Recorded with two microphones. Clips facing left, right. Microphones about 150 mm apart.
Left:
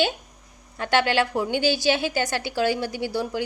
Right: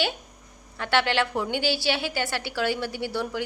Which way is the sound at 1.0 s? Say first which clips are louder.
Left 2 dB; 15° left (ahead or behind).